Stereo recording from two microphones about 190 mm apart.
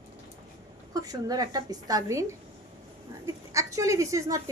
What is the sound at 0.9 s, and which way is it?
A woman's voice, 20° right (ahead or behind).